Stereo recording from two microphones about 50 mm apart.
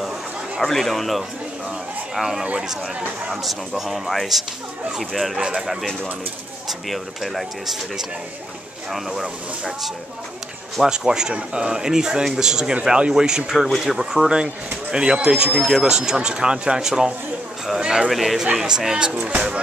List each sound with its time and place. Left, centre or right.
0.6 s speech: centre
3.4 s speech: centre
10.8 s speech: centre
18.1 s speech: centre; by 19.6 s right